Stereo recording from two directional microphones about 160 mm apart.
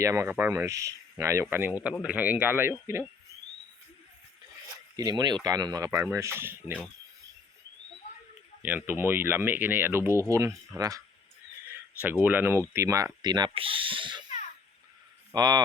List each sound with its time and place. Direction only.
0.0 s speech: 15° right (ahead or behind)
4.9 s speech: 25° right (ahead or behind)
8.6 s speech: 10° right (ahead or behind)
12.2 s speech: 10° right (ahead or behind); by 14.3 s 30° right (ahead or behind)
15.3 s speech: 25° right (ahead or behind)